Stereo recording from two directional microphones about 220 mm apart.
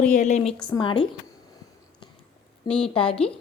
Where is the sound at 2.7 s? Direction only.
20° left (ahead or behind).